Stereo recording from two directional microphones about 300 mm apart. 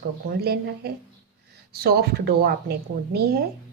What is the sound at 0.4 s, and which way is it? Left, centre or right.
A woman's voice, right.